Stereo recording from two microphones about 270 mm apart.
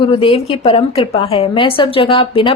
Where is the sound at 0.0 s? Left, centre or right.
Centre.